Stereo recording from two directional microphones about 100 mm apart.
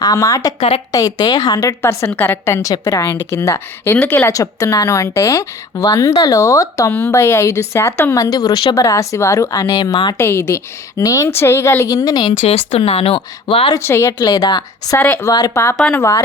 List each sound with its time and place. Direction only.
0.0 s a woman's voice: 40° left (ahead or behind)
1.8 s a woman's voice: 30° left (ahead or behind)
3.9 s speech: 15° left (ahead or behind)
4.3 s a woman's voice: 35° left (ahead or behind)
8.7 s a woman's voice: 30° left (ahead or behind)
10.2 s a woman's voice: 25° left (ahead or behind); by 12.3 s 40° left (ahead or behind)
12.4 s speech: 90° left; by 13.7 s 70° left (ahead or behind)
13.7 s a woman's voice: 25° left (ahead or behind)
14.2 s a woman's voice: 40° left (ahead or behind)
14.9 s speech: 15° left (ahead or behind)
15.2 s a woman's voice: 40° left (ahead or behind)